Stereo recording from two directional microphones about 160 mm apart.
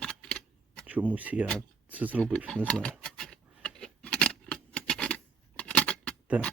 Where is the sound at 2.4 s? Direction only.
5° left (ahead or behind).